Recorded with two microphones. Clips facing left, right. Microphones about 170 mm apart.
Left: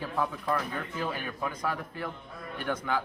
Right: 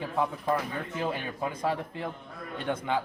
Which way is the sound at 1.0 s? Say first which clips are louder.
Right 3 dB; 25° right (ahead or behind).